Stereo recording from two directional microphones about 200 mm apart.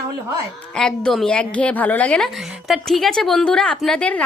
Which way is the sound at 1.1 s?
5° left (ahead or behind).